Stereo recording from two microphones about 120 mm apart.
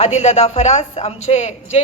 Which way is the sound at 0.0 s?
65° left (ahead or behind).